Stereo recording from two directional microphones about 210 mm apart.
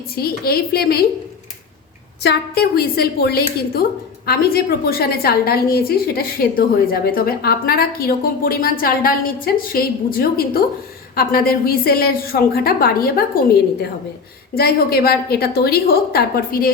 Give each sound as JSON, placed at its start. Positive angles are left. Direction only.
{"t": 0.2, "sound": "a woman's voice", "side_deg": 45}
{"t": 2.2, "sound": "a woman's voice", "side_deg": 50}
{"t": 14.5, "sound": "a woman's voice", "side_deg": 45}